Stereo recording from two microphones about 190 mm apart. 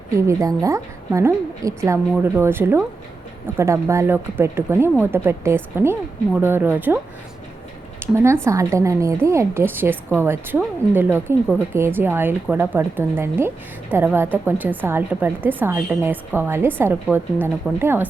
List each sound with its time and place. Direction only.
0.3 s a woman's voice: 15° right (ahead or behind)